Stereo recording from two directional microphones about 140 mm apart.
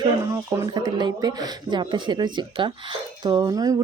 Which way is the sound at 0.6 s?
25° right (ahead or behind).